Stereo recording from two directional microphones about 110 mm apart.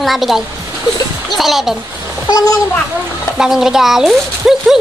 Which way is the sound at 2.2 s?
35° left (ahead or behind).